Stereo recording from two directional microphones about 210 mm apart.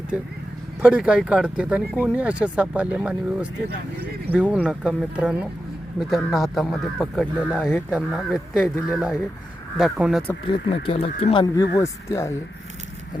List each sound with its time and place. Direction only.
0.8 s speech: 5° right (ahead or behind)
7.9 s speech: 5° right (ahead or behind)
10.8 s speech: 25° left (ahead or behind)